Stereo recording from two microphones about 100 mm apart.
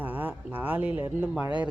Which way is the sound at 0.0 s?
20° right (ahead or behind).